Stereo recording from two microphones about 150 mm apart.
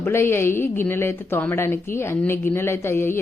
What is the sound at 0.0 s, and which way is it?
A woman's voice, 15° left (ahead or behind).